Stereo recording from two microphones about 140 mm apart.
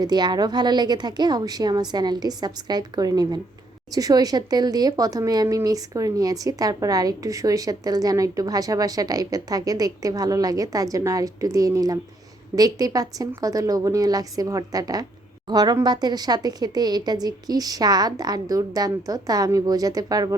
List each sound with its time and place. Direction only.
0.0 s speech: 30° right (ahead or behind)